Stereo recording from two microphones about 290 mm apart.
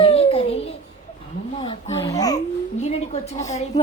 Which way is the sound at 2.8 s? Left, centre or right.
Left.